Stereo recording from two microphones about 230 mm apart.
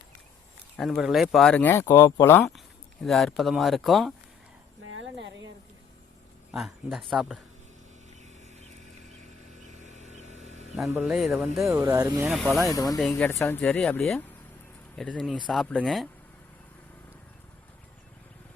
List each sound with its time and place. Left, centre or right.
0.8 s speech: centre
4.8 s a sound: right
6.5 s speech: centre
9.6 s a sound: right
10.8 s speech: centre
11.7 s speech: centre
12.3 s speech: centre
12.6 s speech: centre
13.0 s speech: centre